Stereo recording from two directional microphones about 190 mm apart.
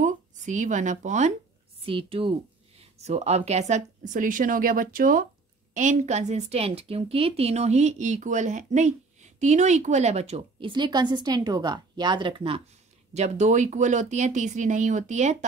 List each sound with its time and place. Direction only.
0.0 s speech: 40° right (ahead or behind)
1.9 s a woman's voice: 30° right (ahead or behind)
13.1 s a woman's voice: 35° right (ahead or behind)